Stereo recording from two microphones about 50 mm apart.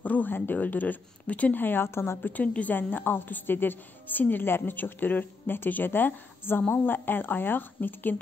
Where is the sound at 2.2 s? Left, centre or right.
Left.